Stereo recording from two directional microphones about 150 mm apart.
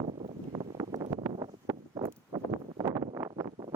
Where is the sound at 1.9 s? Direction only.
35° right (ahead or behind).